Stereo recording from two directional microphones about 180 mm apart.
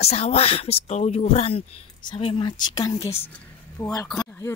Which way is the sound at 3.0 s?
35° left (ahead or behind).